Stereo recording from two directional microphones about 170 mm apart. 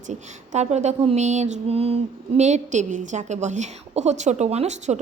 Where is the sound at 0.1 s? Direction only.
40° right (ahead or behind).